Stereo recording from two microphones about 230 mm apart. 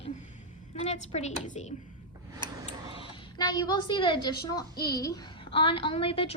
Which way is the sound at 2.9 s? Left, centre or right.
Left.